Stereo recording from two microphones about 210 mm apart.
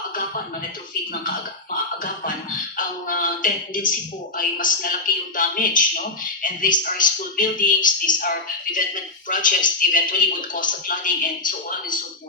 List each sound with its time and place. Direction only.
2.7 s a man's voice: 40° left (ahead or behind)